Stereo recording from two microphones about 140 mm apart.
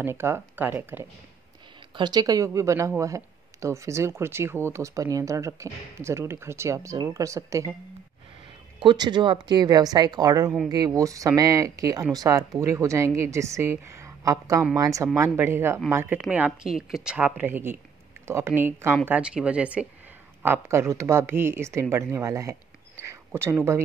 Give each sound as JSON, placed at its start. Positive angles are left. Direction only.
{"t": 0.0, "sound": "speech", "side_deg": -15}
{"t": 2.0, "sound": "speech", "side_deg": -30}
{"t": 8.7, "sound": "speech", "side_deg": -30}
{"t": 23.0, "sound": "a sound", "side_deg": -15}